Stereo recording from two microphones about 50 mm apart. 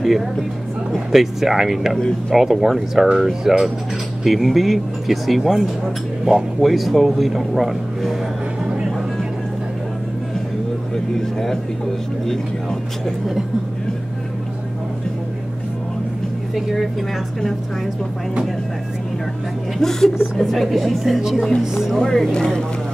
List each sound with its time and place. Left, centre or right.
0.0 s speech: centre
8.6 s vehicle: centre
16.5 s speech: centre
19.8 s speech: centre
21.9 s speech: centre